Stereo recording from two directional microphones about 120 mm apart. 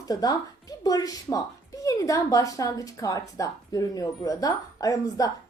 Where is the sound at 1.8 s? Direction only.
25° left (ahead or behind).